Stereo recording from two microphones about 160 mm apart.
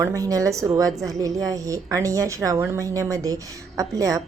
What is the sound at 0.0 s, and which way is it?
A woman's voice, 20° right (ahead or behind).